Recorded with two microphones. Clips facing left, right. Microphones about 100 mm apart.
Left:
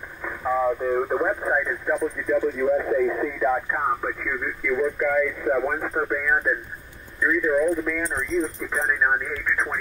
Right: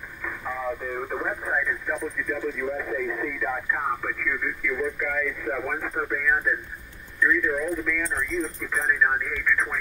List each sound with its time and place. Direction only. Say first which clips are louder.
0.5 s speech: left 9 dB; 30° left (ahead or behind)
7.5 s speech: left 5 dB; 30° left (ahead or behind)